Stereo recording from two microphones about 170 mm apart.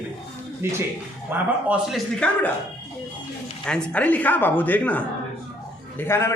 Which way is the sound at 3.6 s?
5° left (ahead or behind).